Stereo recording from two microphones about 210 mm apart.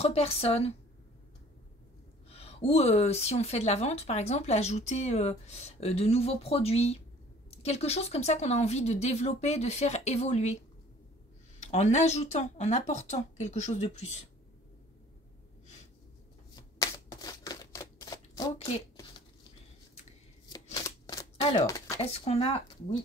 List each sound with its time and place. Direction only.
0.0 s a woman's voice: 30° left (ahead or behind)
2.2 s speech: 30° left (ahead or behind)
11.6 s speech: 30° left (ahead or behind)
16.5 s a sound: 15° left (ahead or behind)
20.7 s a sound: 15° left (ahead or behind)
22.0 s a woman's voice: 30° left (ahead or behind)